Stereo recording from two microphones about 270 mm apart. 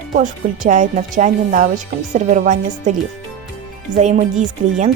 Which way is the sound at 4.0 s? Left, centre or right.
Right.